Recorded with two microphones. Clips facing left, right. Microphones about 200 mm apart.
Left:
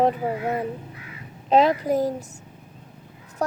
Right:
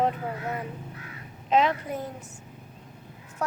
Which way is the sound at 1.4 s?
35° left (ahead or behind).